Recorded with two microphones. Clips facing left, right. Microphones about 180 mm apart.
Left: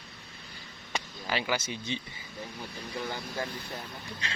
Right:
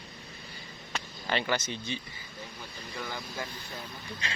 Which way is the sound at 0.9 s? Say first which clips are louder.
Right 1 dB; 5° left (ahead or behind).